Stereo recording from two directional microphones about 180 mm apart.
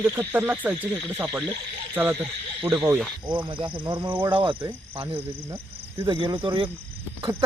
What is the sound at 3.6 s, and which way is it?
Speech, 30° right (ahead or behind).